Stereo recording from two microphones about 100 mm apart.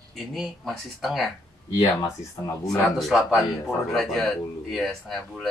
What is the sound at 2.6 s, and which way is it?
Speech, centre (ahead or behind).